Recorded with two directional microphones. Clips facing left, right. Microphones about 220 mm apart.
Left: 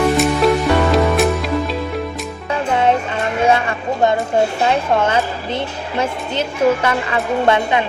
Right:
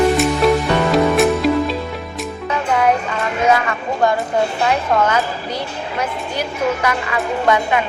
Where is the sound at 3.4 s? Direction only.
30° left (ahead or behind).